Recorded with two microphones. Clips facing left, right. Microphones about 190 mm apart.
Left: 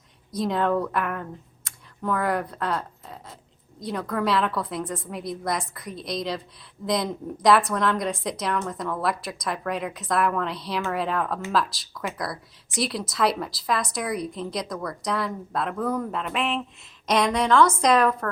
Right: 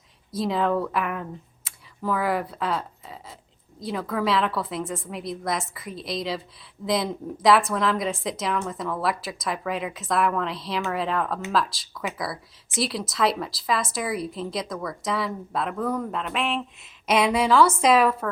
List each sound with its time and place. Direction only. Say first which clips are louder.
0.3 s speech: even; centre (ahead or behind)